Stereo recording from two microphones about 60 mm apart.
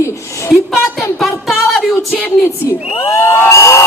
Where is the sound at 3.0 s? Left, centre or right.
Left.